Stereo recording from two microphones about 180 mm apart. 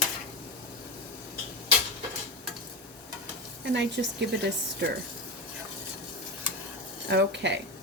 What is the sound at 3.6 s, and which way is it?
Speech, 75° right (ahead or behind).